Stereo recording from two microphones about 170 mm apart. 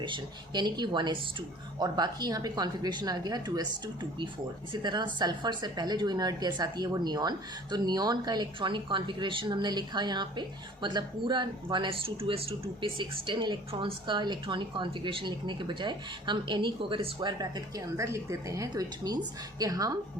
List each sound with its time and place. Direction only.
0.0 s a woman's voice: 25° right (ahead or behind)
4.7 s a woman's voice: 25° right (ahead or behind)